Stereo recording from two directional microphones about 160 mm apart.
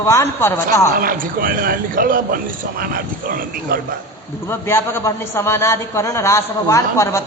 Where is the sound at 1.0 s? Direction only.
60° right (ahead or behind).